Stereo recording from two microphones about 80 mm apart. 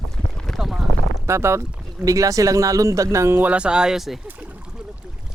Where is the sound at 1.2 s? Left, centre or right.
Right.